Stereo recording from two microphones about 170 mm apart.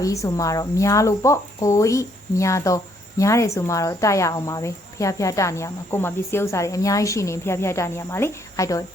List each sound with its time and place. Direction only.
0.0 s speech: 20° left (ahead or behind)